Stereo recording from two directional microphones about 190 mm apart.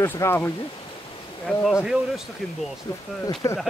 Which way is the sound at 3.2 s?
30° left (ahead or behind).